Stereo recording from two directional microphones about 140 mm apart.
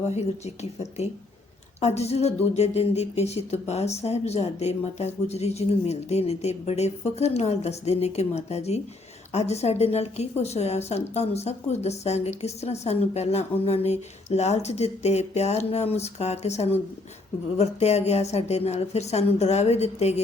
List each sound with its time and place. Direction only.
0.2 s speech: 50° left (ahead or behind)